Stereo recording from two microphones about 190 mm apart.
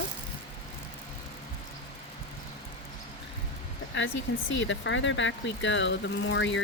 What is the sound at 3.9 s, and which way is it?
Speech, 75° left (ahead or behind).